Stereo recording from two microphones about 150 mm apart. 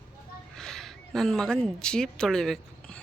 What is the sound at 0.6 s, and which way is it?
A woman's voice, 5° left (ahead or behind).